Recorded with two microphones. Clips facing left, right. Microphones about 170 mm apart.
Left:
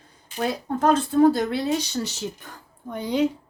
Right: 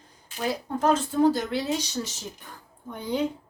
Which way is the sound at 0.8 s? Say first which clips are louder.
Left 4 dB; 60° left (ahead or behind).